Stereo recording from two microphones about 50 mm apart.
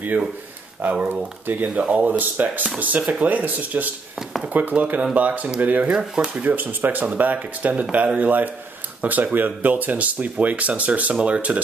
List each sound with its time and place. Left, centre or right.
0.8 s speech: right
1.8 s speech: right
5.9 s speech: centre
6.4 s speech: right